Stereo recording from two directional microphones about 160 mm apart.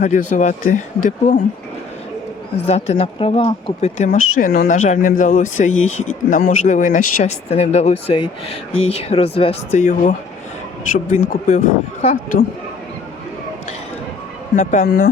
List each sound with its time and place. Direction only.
0.0 s a man's voice: 50° left (ahead or behind)
2.6 s a man's voice: 40° left (ahead or behind); by 4.7 s 70° left (ahead or behind)
4.7 s a man's voice: 50° left (ahead or behind)
14.5 s a man's voice: 50° left (ahead or behind)
14.8 s speech: 80° left